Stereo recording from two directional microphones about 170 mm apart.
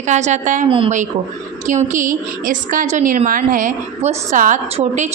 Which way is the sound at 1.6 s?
50° right (ahead or behind).